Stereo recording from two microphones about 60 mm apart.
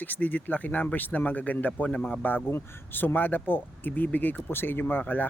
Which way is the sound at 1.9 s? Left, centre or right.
Centre.